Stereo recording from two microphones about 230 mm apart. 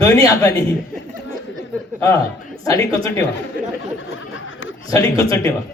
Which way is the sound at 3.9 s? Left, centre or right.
Left.